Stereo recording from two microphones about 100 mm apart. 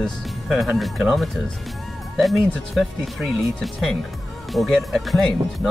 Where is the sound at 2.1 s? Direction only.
Centre (ahead or behind).